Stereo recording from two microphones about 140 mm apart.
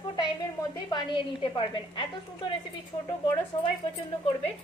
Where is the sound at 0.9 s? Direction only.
35° left (ahead or behind).